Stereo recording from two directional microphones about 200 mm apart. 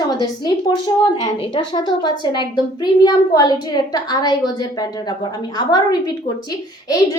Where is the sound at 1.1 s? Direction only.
25° left (ahead or behind).